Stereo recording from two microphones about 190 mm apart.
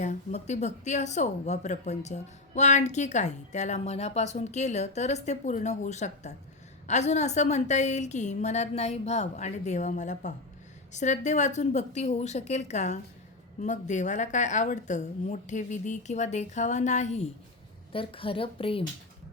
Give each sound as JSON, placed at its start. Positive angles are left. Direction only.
{"t": 0.0, "sound": "a woman's voice", "side_deg": 35}